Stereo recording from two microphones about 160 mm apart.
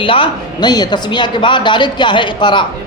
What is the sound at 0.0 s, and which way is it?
A woman's voice, 35° left (ahead or behind).